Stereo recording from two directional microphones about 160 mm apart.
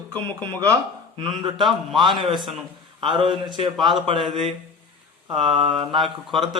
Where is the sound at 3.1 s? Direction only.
30° right (ahead or behind).